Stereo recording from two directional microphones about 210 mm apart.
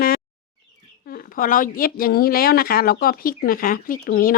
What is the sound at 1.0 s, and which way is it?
Speech, 40° left (ahead or behind).